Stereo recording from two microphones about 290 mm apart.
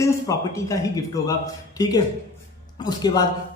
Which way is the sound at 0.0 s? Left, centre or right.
Centre.